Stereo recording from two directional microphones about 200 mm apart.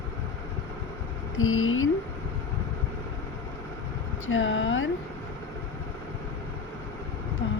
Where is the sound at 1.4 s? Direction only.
90° left.